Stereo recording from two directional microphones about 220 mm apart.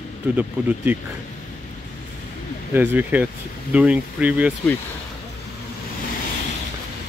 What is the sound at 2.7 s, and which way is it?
Speech, 10° right (ahead or behind).